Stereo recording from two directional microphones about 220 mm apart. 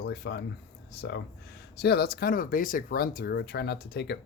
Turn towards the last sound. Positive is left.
turn(degrees=50)  # may be behind; listen again after turning